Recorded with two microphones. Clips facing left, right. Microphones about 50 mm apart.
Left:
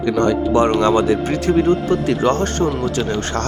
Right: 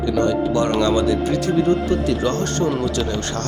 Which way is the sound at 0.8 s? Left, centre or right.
Left.